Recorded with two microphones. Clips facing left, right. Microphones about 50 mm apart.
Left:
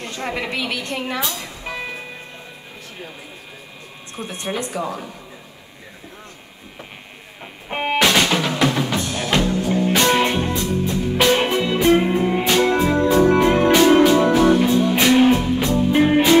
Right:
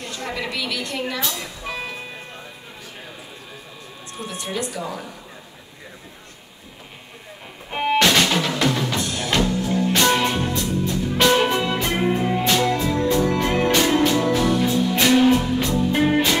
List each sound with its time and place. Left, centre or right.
0.0 s a woman's voice: left
1.7 s music: left
4.3 s a woman's voice: left
7.7 s music: left
8.0 s drum: centre
8.9 s music: left
11.2 s music: centre
11.5 s music: right
11.8 s music: left
12.5 s music: left